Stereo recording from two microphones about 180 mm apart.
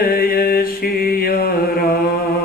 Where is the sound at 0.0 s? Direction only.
55° left (ahead or behind).